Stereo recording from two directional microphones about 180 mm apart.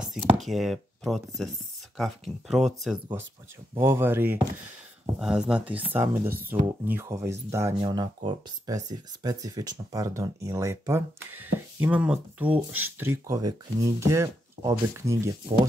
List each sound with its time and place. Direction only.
0.0 s speech: 5° right (ahead or behind)
3.7 s speech: 15° right (ahead or behind)